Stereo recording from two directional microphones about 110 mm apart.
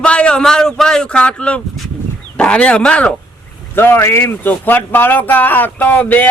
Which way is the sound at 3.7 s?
20° left (ahead or behind).